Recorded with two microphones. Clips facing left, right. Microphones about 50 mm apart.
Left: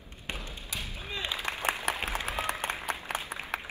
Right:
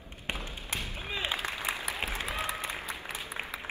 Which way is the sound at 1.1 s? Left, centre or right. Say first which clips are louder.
Right 2 dB; right.